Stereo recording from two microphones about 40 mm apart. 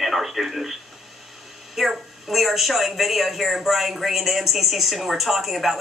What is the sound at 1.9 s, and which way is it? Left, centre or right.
A woman's voice, centre.